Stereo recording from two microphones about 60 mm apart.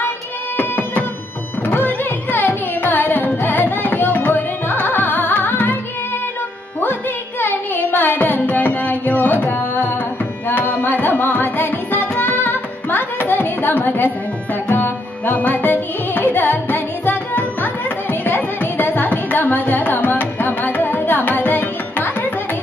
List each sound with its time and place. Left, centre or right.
0.6 s music: left
1.7 s carnatic music: left
3.3 s music: left
6.8 s music: left